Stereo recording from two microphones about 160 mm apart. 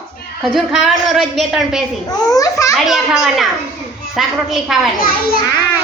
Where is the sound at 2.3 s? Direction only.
20° left (ahead or behind).